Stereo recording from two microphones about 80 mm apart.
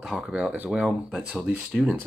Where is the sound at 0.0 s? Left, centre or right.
Centre.